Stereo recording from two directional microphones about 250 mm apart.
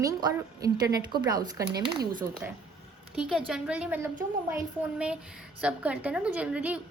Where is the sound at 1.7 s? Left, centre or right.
Right.